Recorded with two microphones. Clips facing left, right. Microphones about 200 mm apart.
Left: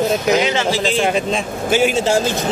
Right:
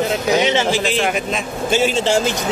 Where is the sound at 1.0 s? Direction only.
30° left (ahead or behind).